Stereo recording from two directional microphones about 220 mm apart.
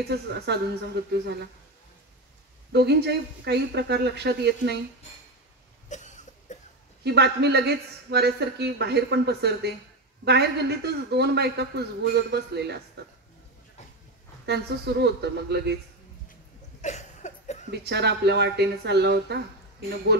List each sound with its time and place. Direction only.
0.1 s speech: 50° right (ahead or behind)
2.7 s speech: 50° right (ahead or behind)
5.9 s cough: 35° left (ahead or behind)
7.0 s speech: 50° right (ahead or behind)
14.4 s speech: 50° right (ahead or behind)
16.8 s a sound: 30° left (ahead or behind)
17.6 s speech: 50° right (ahead or behind)